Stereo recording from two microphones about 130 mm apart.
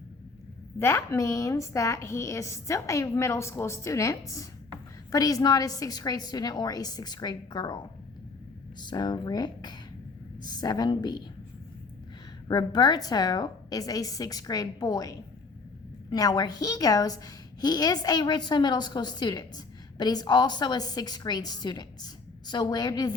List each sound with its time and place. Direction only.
0.8 s a woman's voice: 20° left (ahead or behind); by 7.8 s 35° left (ahead or behind)
8.8 s a woman's voice: 35° left (ahead or behind)
12.5 s a woman's voice: 35° left (ahead or behind)